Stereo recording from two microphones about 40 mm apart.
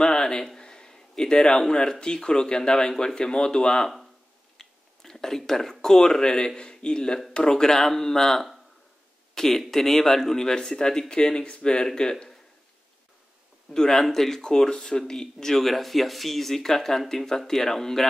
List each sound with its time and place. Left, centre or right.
0.0 s a sound: centre
0.6 s speech: centre
4.6 s whispering: centre
5.4 s speech: centre
13.7 s speech: centre